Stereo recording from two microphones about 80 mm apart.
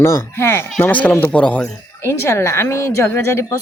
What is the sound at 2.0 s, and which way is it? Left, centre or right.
Speech, left.